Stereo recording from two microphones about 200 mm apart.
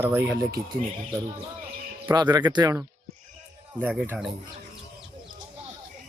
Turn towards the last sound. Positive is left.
turn(degrees=-5)  # may be behind; listen again after turning